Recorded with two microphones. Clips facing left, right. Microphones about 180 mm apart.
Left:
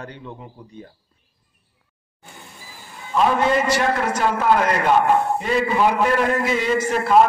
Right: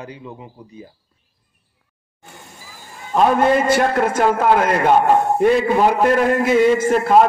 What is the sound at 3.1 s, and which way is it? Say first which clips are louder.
A man's voice: right 3 dB; 50° right (ahead or behind).